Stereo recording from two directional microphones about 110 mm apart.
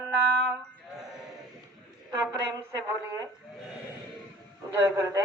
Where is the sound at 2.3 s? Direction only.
30° right (ahead or behind).